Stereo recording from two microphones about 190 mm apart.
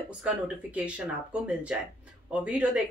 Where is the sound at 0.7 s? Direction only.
5° right (ahead or behind).